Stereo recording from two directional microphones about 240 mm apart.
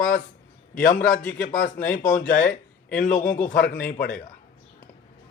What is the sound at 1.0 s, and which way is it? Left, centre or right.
Speech, centre.